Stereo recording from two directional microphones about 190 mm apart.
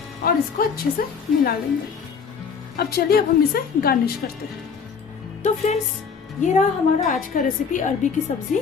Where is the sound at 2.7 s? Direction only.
55° left (ahead or behind).